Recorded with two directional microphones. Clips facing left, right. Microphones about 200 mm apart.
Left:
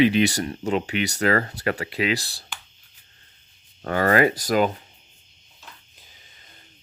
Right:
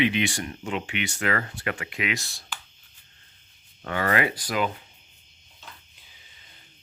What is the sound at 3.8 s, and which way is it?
Speech, 40° left (ahead or behind).